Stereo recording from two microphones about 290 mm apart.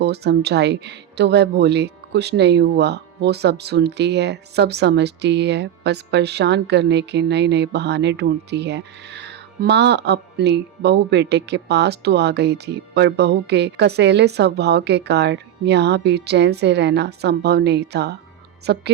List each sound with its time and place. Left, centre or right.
0.0 s speech: right